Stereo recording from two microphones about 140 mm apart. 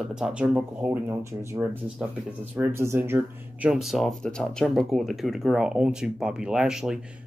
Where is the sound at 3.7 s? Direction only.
Centre (ahead or behind).